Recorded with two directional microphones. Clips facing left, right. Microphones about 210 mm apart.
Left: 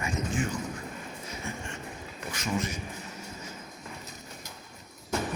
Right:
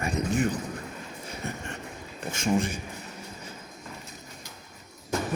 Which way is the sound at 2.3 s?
30° right (ahead or behind).